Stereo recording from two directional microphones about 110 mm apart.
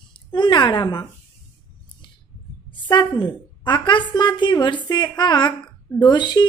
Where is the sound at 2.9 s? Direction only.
45° left (ahead or behind).